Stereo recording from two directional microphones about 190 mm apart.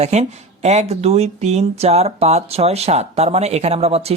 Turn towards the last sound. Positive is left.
turn(degrees=-35)  # may be behind; listen again after turning